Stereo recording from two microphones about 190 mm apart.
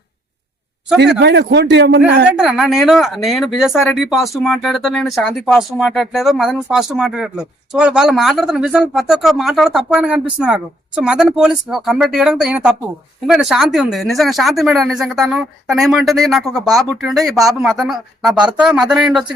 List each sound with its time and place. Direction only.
1.2 s speech: 65° right (ahead or behind)
2.2 s speech: 5° right (ahead or behind)